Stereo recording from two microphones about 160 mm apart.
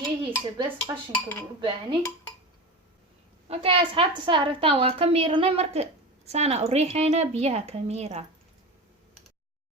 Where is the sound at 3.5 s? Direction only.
40° right (ahead or behind).